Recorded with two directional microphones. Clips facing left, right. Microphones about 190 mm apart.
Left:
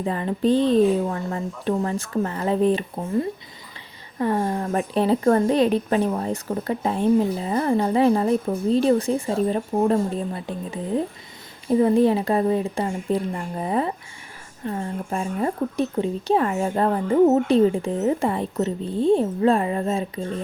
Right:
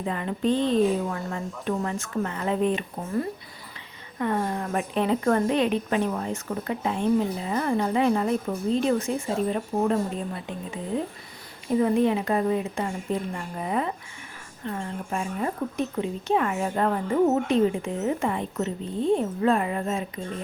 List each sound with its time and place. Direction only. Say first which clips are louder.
0.0 s speech: left 4 dB; 35° left (ahead or behind)
4.2 s speech: left 4 dB; 30° left (ahead or behind)
11.7 s speech: left 4 dB; 35° left (ahead or behind)